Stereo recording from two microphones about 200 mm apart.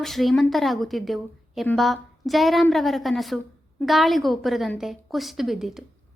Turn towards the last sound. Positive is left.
turn(degrees=0)  # may be behind; listen again after turning